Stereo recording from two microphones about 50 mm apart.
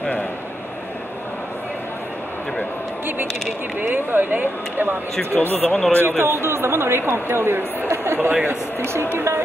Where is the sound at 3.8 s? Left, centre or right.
Right.